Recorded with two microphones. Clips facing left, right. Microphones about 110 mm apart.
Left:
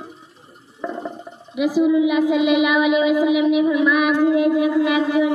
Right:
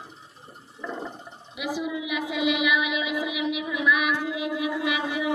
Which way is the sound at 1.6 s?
45° left (ahead or behind).